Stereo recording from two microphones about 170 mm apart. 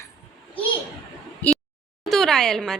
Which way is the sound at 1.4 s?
10° left (ahead or behind).